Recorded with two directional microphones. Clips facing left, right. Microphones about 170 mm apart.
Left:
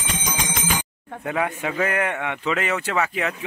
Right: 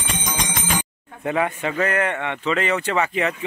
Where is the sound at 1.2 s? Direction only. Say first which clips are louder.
Right 3 dB; centre (ahead or behind).